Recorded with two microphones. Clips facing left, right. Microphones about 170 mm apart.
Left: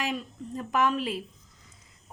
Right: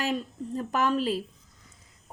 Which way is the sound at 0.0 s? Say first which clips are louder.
Right 3 dB; 35° right (ahead or behind).